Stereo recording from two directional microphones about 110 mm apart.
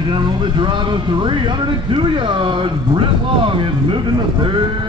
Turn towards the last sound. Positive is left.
turn(degrees=-45)  # may be behind; listen again after turning